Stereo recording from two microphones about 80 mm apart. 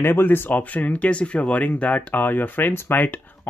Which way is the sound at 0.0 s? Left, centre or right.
Left.